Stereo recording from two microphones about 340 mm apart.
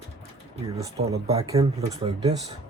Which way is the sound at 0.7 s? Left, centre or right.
Centre.